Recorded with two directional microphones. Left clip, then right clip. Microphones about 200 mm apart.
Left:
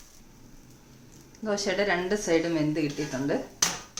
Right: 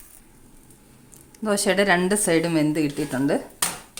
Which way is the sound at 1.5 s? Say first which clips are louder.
Right 7 dB; 50° right (ahead or behind).